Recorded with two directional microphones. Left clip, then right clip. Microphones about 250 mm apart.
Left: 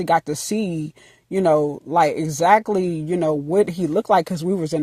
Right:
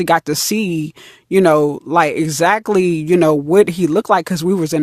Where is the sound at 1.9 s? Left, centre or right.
Right.